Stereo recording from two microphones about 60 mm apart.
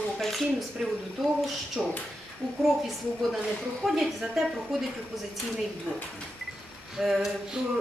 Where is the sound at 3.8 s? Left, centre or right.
Centre.